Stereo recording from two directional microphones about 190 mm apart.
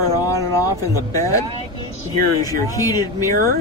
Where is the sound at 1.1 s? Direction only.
15° left (ahead or behind).